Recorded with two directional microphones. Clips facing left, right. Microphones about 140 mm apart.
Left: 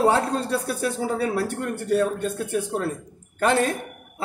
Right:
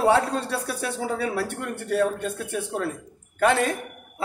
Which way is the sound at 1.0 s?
40° left (ahead or behind).